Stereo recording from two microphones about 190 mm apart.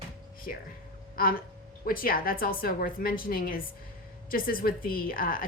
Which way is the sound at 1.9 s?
50° left (ahead or behind).